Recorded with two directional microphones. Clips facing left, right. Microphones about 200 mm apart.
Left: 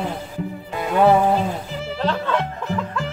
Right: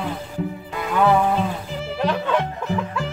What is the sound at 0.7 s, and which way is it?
Music, 30° left (ahead or behind).